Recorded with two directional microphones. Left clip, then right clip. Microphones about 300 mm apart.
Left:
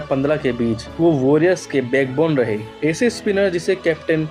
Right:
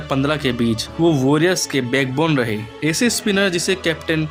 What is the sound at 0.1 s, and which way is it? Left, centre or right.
Speech, right.